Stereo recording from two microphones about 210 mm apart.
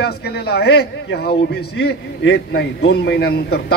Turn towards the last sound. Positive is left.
turn(degrees=50)  # may be behind; listen again after turning